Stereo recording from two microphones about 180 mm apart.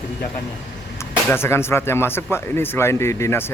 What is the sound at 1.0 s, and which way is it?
Speech, 15° left (ahead or behind).